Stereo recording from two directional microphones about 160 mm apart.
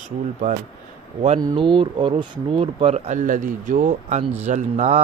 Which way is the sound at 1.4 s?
30° right (ahead or behind).